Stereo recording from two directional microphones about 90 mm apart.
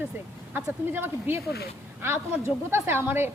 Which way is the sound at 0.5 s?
25° right (ahead or behind).